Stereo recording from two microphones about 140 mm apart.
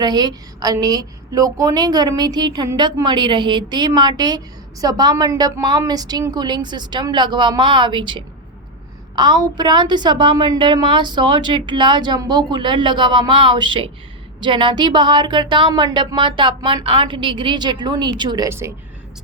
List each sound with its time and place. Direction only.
0.0 s a woman's voice: 30° right (ahead or behind)
18.4 s a woman's voice: 20° right (ahead or behind)